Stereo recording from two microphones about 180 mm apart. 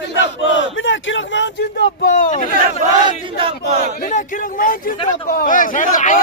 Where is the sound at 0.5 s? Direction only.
90° left.